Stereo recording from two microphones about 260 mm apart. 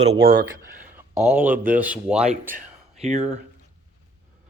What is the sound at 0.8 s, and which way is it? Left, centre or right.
Speech, centre.